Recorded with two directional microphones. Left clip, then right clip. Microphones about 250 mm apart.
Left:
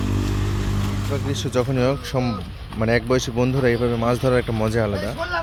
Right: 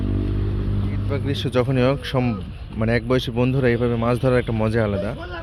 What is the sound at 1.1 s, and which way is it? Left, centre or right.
Speech, centre.